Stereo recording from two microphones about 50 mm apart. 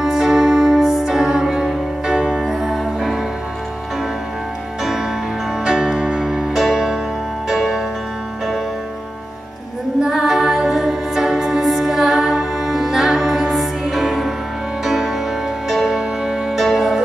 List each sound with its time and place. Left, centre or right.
0.0 s music: centre
2.4 s music: centre
5.7 s music: centre
10.0 s music: centre